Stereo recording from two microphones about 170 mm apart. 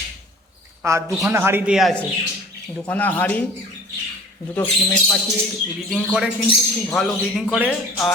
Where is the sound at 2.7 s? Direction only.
10° left (ahead or behind).